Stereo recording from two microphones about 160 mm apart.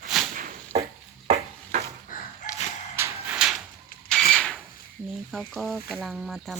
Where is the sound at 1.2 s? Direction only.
40° right (ahead or behind).